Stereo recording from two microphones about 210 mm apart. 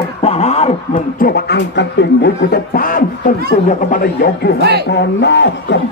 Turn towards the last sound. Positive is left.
turn(degrees=55)  # may be behind; listen again after turning